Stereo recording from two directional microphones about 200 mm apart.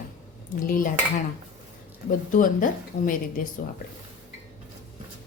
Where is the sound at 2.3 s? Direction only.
40° left (ahead or behind).